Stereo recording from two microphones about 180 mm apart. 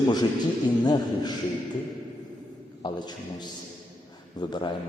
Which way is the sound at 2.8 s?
25° left (ahead or behind).